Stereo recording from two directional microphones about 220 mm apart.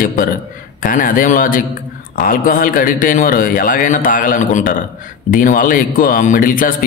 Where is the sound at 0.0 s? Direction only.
40° left (ahead or behind).